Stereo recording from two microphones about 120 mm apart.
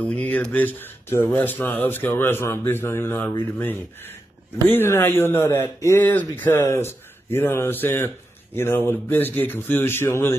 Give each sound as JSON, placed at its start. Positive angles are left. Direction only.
{"t": 0.0, "sound": "speech", "side_deg": 10}